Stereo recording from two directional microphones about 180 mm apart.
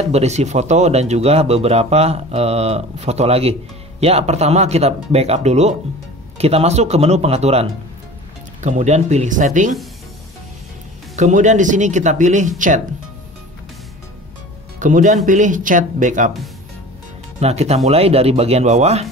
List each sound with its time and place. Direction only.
0.0 s speech: 35° right (ahead or behind)
8.6 s speech: 40° right (ahead or behind)
11.1 s speech: 40° right (ahead or behind)
14.8 s speech: 45° right (ahead or behind)
17.4 s speech: 35° right (ahead or behind)